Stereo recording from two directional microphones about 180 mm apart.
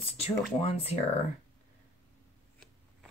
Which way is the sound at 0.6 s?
30° left (ahead or behind).